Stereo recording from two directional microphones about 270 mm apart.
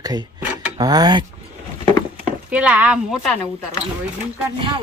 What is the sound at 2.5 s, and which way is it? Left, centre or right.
A woman's voice, centre.